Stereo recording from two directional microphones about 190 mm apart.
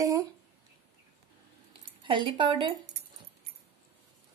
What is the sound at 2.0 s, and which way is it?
Speech, 25° right (ahead or behind).